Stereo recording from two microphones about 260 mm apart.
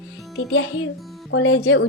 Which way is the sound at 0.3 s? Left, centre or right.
Left.